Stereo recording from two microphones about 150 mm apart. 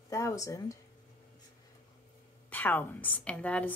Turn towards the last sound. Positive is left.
turn(degrees=10)  # may be behind; listen again after turning